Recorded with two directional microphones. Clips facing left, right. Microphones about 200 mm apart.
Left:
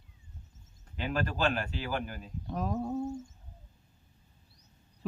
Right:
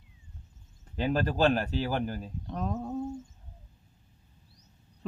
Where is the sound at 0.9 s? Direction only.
35° right (ahead or behind).